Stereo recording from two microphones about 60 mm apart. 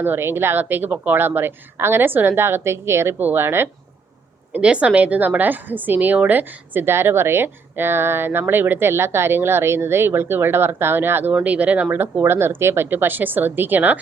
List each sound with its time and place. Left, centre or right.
0.0 s a woman's voice: right
4.6 s a woman's voice: centre; by 11.3 s right
11.4 s speech: right
12.2 s a woman's voice: right